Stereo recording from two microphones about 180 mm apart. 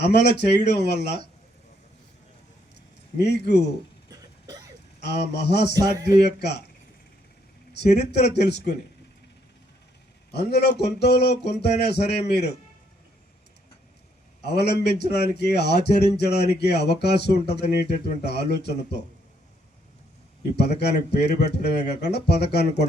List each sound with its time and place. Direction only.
0.0 s speech: 70° left (ahead or behind)
2.7 s a sound: 65° left (ahead or behind)
4.9 s a man's voice: 65° left (ahead or behind)
5.7 s speech: 20° right (ahead or behind)
6.2 s a man's voice: 65° left (ahead or behind)
7.7 s speech: 65° left (ahead or behind)
10.3 s a man's voice: 65° left (ahead or behind)
14.4 s a man's voice: 65° left (ahead or behind)
20.6 s a man's voice: 65° left (ahead or behind)